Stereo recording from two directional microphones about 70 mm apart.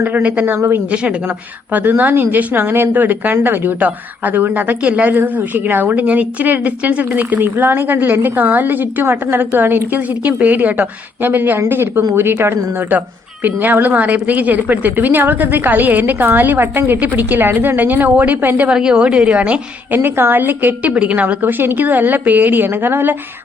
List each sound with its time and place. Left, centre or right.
0.0 s speech: right
0.5 s speech: right
18.7 s a woman's voice: centre
20.0 s speech: right